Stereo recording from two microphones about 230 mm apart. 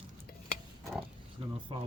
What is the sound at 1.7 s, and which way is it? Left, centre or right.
Speech, right.